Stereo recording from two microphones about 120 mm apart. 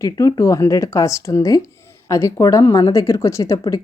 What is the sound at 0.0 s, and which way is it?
A woman's voice, 30° left (ahead or behind).